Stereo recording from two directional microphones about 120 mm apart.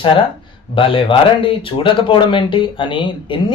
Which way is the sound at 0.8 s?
45° left (ahead or behind).